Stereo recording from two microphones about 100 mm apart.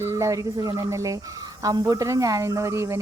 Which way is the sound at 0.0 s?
30° right (ahead or behind).